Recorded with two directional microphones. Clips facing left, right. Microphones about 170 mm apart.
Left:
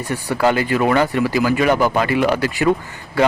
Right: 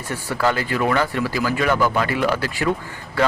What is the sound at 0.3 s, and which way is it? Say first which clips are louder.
Speech: left 4 dB; 20° left (ahead or behind).